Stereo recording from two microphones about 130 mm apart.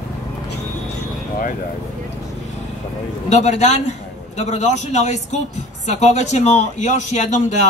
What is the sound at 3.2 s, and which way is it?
A man's voice, 60° left (ahead or behind).